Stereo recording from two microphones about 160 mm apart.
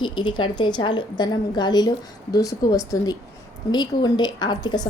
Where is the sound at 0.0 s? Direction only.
30° left (ahead or behind).